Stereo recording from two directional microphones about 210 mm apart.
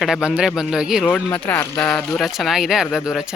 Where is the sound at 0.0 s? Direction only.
5° right (ahead or behind).